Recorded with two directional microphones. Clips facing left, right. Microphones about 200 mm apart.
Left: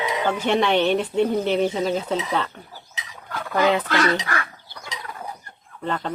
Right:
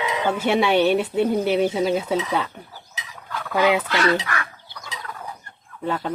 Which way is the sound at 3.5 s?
10° right (ahead or behind).